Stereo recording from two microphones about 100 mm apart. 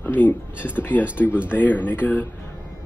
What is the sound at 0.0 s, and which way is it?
Speech, 20° left (ahead or behind).